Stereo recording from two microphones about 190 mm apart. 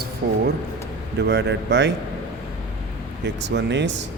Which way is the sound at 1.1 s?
65° right (ahead or behind).